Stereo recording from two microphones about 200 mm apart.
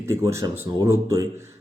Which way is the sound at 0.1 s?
15° right (ahead or behind).